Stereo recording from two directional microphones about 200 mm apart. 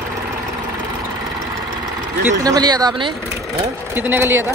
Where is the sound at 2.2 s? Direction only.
20° right (ahead or behind).